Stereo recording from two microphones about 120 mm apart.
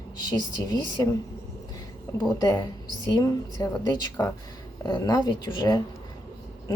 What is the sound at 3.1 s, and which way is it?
Speech, 30° left (ahead or behind).